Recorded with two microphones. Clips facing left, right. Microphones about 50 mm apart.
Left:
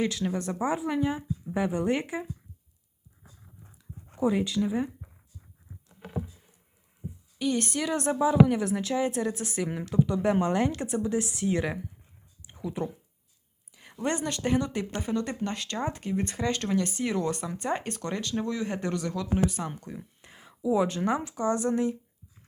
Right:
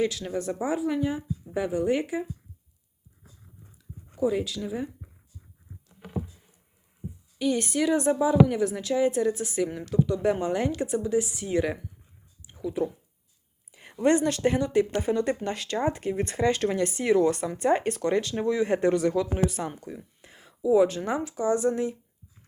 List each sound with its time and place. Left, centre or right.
0.0 s a woman's voice: centre
4.2 s a woman's voice: centre
7.3 s a woman's voice: centre
9.6 s a woman's voice: centre
12.5 s a sound: centre
13.7 s a sound: right
13.9 s speech: centre
19.9 s speech: centre